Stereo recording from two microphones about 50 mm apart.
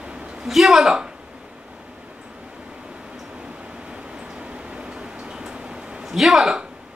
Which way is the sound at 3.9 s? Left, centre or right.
Centre.